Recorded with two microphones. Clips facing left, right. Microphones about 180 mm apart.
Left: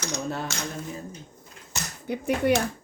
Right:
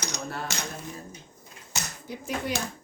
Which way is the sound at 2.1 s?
60° left (ahead or behind).